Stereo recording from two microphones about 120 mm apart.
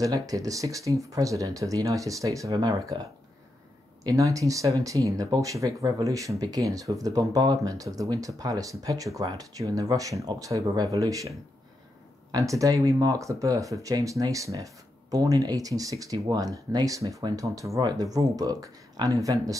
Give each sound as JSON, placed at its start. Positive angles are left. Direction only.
{"t": 0.0, "sound": "speech", "side_deg": -30}
{"t": 4.0, "sound": "speech", "side_deg": -30}